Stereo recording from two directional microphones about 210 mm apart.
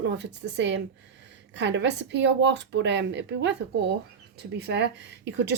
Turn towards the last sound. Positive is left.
turn(degrees=-55)  # may be behind; listen again after turning